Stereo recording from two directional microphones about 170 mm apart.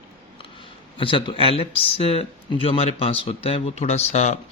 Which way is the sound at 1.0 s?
30° left (ahead or behind).